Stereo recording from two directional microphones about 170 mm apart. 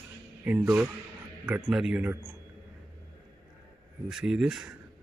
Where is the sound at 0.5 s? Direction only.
5° right (ahead or behind).